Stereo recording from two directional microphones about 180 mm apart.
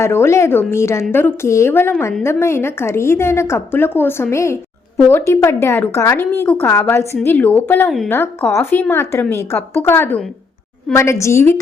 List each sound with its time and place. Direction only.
0.0 s a woman's voice: 15° left (ahead or behind)
7.9 s speech: centre (ahead or behind)
8.1 s a woman's voice: 10° left (ahead or behind)